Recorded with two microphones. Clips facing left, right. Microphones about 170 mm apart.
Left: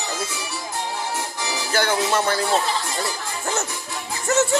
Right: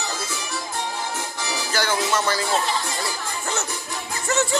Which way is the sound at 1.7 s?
55° left (ahead or behind).